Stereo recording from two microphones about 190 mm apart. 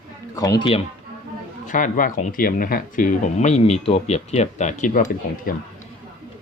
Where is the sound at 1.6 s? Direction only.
45° left (ahead or behind).